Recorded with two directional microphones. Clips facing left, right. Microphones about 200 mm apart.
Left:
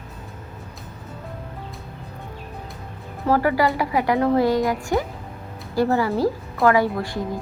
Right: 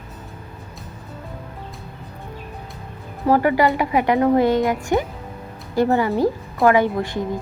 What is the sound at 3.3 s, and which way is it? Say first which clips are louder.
A woman's voice: right 3 dB; 20° right (ahead or behind).